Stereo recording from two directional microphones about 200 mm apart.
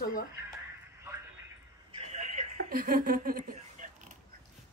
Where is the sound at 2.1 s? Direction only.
35° right (ahead or behind).